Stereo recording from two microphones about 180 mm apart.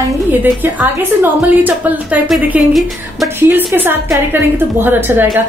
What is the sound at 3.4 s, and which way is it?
A woman's voice, 10° right (ahead or behind).